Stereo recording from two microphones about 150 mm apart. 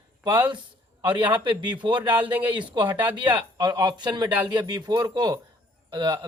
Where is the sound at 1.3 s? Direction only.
30° right (ahead or behind).